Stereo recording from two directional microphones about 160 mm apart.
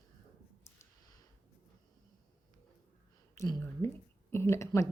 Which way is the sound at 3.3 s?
20° left (ahead or behind).